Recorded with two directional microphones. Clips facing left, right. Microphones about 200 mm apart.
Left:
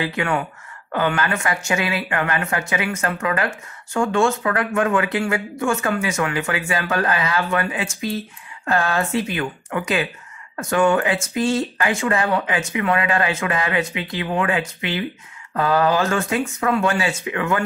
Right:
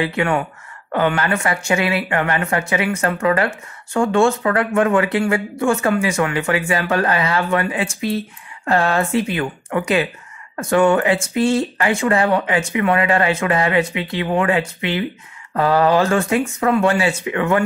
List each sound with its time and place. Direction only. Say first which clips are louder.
0.9 s speech: right 3 dB; 30° right (ahead or behind)